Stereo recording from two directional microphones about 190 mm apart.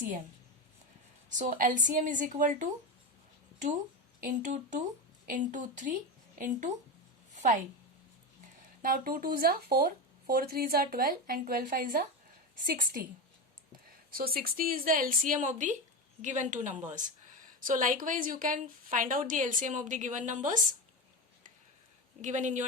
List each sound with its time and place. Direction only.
1.3 s speech: 45° right (ahead or behind)
4.2 s a woman's voice: 40° right (ahead or behind)
8.8 s speech: 50° right (ahead or behind)
14.1 s a woman's voice: 50° right (ahead or behind)
22.2 s a woman's voice: 40° right (ahead or behind)